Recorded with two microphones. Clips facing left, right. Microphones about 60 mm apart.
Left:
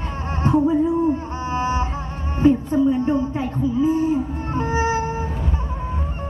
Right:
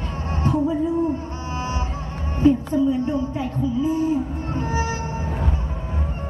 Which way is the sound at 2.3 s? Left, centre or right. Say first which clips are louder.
Left 1 dB; left.